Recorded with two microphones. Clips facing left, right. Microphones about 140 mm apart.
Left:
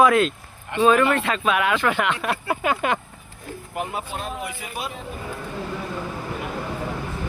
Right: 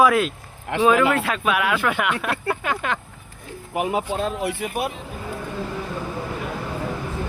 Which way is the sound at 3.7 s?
85° right.